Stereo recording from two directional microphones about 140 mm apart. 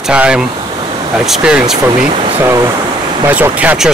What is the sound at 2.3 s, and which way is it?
Speech, 20° right (ahead or behind).